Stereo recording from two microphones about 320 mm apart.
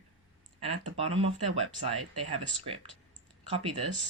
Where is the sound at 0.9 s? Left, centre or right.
Centre.